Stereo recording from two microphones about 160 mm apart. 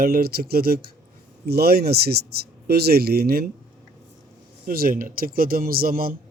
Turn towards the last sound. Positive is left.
turn(degrees=-65)  # may be behind; listen again after turning